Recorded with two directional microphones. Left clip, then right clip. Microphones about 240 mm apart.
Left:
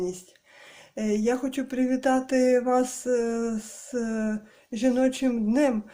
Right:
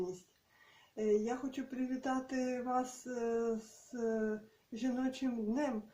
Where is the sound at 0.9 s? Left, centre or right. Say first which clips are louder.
Left 8 dB; left.